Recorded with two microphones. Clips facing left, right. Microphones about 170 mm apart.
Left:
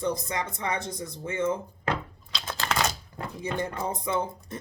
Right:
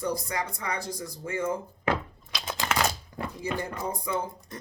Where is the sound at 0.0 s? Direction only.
25° left (ahead or behind).